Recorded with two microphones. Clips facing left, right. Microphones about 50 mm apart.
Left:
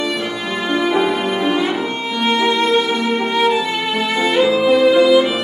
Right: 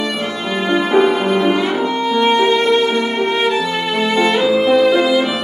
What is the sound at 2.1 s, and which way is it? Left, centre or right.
Music, centre.